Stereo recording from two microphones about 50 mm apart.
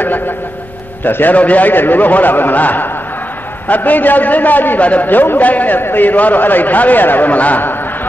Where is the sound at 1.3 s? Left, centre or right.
Left.